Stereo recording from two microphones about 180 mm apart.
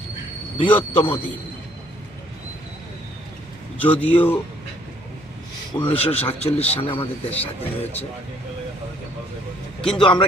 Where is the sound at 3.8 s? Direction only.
10° left (ahead or behind).